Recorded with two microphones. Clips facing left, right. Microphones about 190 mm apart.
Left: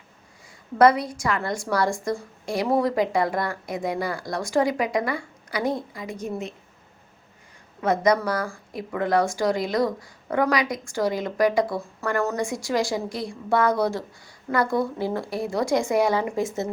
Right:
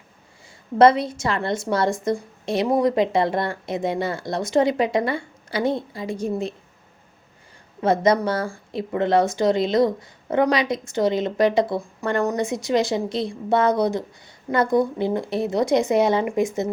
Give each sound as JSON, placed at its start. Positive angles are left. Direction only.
{"t": 0.8, "sound": "a woman's voice", "side_deg": -25}
{"t": 7.8, "sound": "a woman's voice", "side_deg": -30}